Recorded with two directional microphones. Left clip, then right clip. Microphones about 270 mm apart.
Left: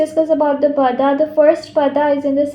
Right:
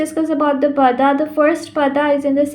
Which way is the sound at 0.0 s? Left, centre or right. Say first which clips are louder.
Left 3 dB; right.